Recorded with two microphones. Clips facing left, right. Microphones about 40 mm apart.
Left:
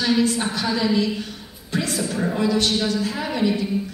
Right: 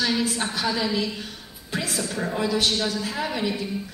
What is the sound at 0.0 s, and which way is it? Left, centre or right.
A woman's voice, centre.